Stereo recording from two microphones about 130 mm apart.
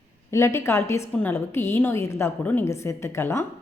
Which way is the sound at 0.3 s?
20° left (ahead or behind).